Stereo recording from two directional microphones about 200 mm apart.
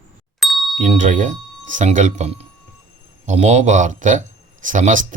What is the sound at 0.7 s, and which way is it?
Speech, 40° right (ahead or behind).